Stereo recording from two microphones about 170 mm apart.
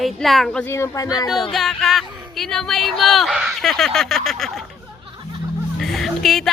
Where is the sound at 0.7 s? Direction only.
15° left (ahead or behind).